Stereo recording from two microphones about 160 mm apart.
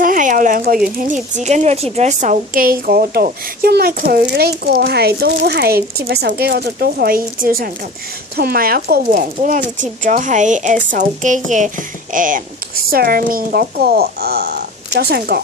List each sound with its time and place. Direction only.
0.0 s a sound: 55° right (ahead or behind)
1.0 s a woman's voice: 50° right (ahead or behind); by 9.0 s 65° right (ahead or behind)
9.1 s a woman's voice: 55° right (ahead or behind); by 15.4 s 85° right